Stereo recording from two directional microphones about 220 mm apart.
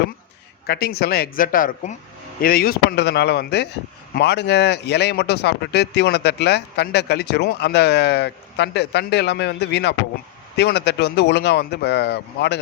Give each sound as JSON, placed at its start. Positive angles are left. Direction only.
{"t": 0.7, "sound": "speech", "side_deg": 45}